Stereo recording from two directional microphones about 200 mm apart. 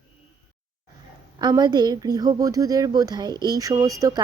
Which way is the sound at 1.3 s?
20° right (ahead or behind).